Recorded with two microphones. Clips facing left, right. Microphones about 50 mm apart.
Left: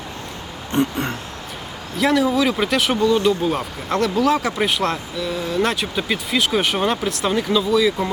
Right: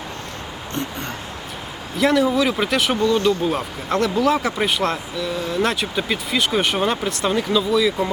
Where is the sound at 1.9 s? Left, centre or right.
Centre.